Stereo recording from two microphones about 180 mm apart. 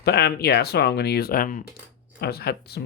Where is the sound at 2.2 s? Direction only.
60° left (ahead or behind).